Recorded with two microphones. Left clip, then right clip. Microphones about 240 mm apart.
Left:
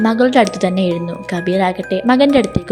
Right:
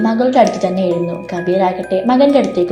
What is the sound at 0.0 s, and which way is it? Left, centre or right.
Speech, left.